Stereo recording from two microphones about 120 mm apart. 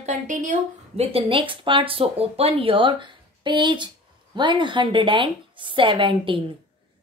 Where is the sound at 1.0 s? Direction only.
55° right (ahead or behind).